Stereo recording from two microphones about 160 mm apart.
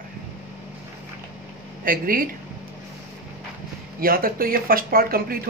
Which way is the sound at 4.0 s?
65° right (ahead or behind).